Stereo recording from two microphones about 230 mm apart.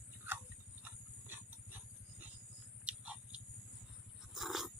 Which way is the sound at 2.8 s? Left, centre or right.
Centre.